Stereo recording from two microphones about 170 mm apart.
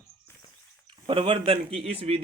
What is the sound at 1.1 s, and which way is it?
A man's voice, 30° right (ahead or behind).